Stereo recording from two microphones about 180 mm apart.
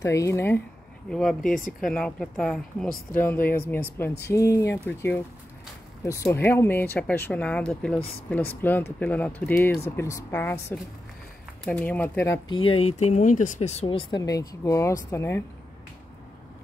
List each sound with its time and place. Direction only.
0.0 s speech: 15° left (ahead or behind)
1.1 s speech: 5° left (ahead or behind)
4.3 s speech: 15° left (ahead or behind)
12.4 s speech: 30° left (ahead or behind); by 15.4 s 15° left (ahead or behind)